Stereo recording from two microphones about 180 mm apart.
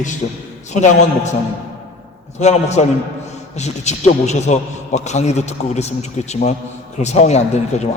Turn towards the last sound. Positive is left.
turn(degrees=40)  # may be behind; listen again after turning